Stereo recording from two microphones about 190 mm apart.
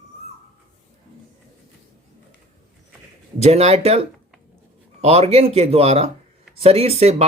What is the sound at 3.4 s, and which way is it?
Speech, 35° right (ahead or behind).